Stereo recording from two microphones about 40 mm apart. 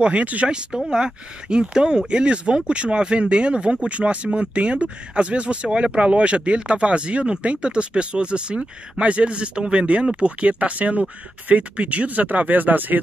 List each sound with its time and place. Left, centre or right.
0.0 s speech: right
0.5 s speech: centre; by 13.0 s right